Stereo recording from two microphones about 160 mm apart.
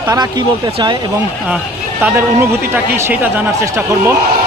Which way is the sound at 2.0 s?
15° right (ahead or behind).